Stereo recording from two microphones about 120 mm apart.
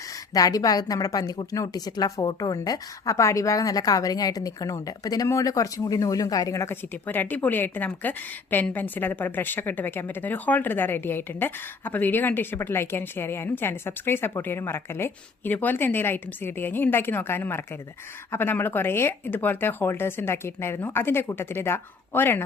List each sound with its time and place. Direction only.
0.3 s a woman's voice: 30° left (ahead or behind)